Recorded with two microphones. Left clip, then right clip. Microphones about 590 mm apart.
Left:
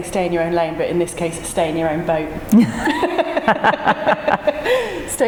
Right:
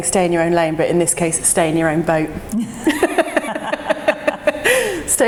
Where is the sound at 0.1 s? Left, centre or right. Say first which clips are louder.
Right 3 dB; right.